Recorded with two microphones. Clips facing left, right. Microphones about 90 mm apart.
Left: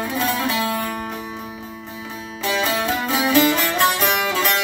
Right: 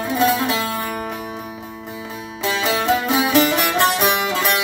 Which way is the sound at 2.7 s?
20° right (ahead or behind).